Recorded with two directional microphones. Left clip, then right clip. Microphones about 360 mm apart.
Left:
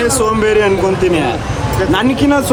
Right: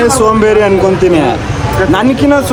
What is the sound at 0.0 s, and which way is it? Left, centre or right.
Speech, centre.